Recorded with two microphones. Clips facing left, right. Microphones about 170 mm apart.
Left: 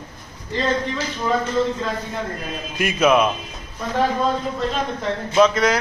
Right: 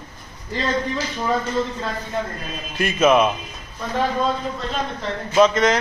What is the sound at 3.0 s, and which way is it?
Speech, 5° right (ahead or behind).